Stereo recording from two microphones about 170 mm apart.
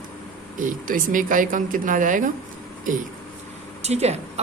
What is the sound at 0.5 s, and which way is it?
Speech, 50° right (ahead or behind).